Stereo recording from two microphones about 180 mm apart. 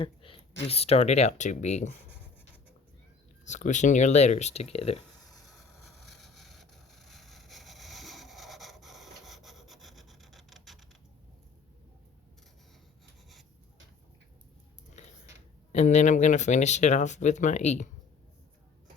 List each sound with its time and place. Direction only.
0.0 s speech: 30° left (ahead or behind)
3.4 s speech: 40° left (ahead or behind)
6.1 s vehicle: centre (ahead or behind)
15.7 s speech: 40° left (ahead or behind)